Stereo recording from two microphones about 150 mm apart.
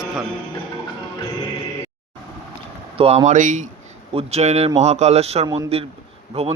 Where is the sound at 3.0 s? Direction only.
45° right (ahead or behind).